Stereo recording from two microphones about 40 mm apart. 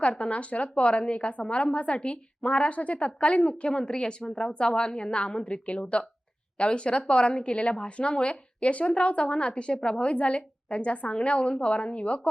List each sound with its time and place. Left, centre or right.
0.0 s a woman's voice: left